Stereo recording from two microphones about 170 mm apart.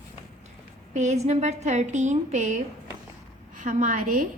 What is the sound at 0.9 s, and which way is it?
A woman's voice, 40° right (ahead or behind).